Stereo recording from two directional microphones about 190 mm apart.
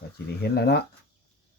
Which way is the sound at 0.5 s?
60° left (ahead or behind).